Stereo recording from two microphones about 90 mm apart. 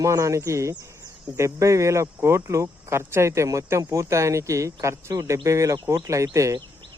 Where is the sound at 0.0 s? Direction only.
35° right (ahead or behind).